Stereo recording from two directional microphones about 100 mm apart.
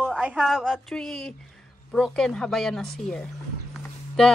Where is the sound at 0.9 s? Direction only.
5° left (ahead or behind).